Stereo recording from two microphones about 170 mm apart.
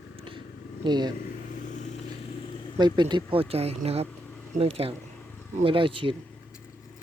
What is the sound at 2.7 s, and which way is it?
Speech, 25° right (ahead or behind).